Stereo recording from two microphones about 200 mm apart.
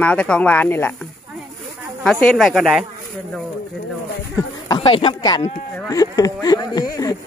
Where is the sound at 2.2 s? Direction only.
Centre (ahead or behind).